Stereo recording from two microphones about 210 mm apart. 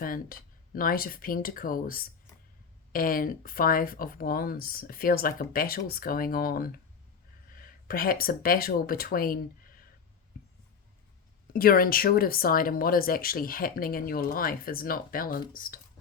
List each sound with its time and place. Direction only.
0.0 s speech: 40° left (ahead or behind)
11.5 s speech: 45° left (ahead or behind)